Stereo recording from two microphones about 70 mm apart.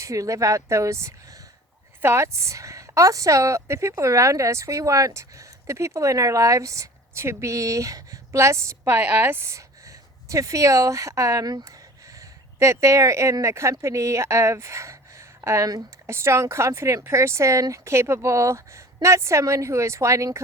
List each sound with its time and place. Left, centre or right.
0.0 s a woman's voice: right
9.0 s speech: right
9.5 s speech: right
12.5 s a woman's voice: right